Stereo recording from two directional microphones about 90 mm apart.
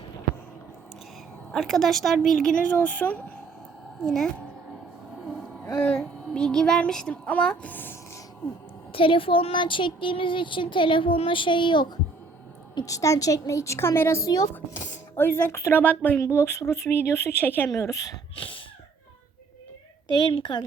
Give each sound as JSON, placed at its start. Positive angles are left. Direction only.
{"t": 1.5, "sound": "a woman's voice", "side_deg": 0}
{"t": 4.0, "sound": "a woman's voice", "side_deg": 5}
{"t": 5.8, "sound": "speech", "side_deg": 10}
{"t": 8.9, "sound": "speech", "side_deg": 80}
{"t": 12.8, "sound": "a woman's voice", "side_deg": 35}
{"t": 15.1, "sound": "speech", "side_deg": 25}
{"t": 16.1, "sound": "speech", "side_deg": 30}
{"t": 17.7, "sound": "a woman's voice", "side_deg": 35}
{"t": 18.3, "sound": "a sound", "side_deg": 80}
{"t": 20.1, "sound": "a woman's voice", "side_deg": 60}